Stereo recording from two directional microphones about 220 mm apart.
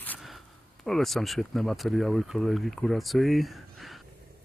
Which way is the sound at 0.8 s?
Centre (ahead or behind).